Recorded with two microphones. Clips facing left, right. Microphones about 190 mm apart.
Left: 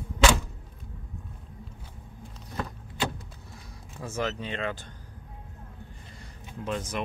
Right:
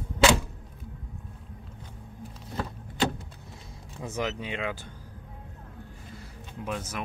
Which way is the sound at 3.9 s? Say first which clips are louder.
Even; 15° right (ahead or behind).